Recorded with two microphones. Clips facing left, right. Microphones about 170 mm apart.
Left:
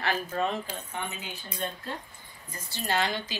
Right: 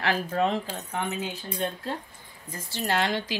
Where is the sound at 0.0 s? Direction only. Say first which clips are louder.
Right 4 dB; 90° right.